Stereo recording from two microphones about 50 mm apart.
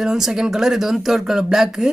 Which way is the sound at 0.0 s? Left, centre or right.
Centre.